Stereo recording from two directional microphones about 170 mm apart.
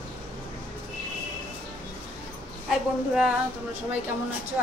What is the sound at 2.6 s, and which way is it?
Speech, 5° right (ahead or behind).